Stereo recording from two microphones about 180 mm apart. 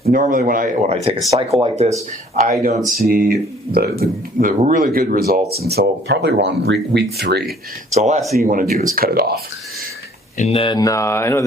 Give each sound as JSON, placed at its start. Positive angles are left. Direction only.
{"t": 0.1, "sound": "speech", "side_deg": -45}
{"t": 3.1, "sound": "speech", "side_deg": -55}
{"t": 7.9, "sound": "speech", "side_deg": -40}
{"t": 10.3, "sound": "speech", "side_deg": 35}